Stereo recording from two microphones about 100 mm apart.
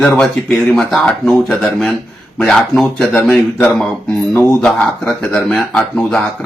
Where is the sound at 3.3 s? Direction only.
20° left (ahead or behind).